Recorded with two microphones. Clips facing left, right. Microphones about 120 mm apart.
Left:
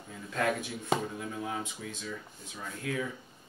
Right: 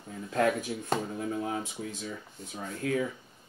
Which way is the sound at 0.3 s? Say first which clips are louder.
Right 4 dB; 40° right (ahead or behind).